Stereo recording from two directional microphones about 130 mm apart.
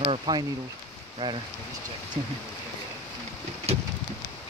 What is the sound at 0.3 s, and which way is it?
Speech, 30° right (ahead or behind).